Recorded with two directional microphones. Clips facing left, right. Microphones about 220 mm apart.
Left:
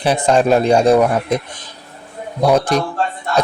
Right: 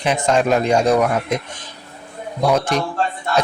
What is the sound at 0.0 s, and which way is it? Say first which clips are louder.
Speech: left 3 dB; 35° left (ahead or behind).